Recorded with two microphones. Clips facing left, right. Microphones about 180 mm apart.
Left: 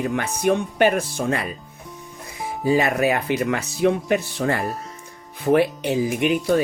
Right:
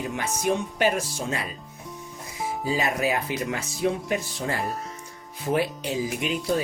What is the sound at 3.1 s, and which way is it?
Speech, 65° left (ahead or behind).